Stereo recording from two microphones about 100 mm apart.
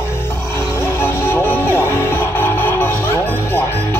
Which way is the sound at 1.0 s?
25° left (ahead or behind).